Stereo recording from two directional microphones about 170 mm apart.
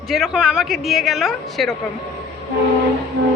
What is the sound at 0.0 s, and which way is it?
A woman's voice, centre (ahead or behind).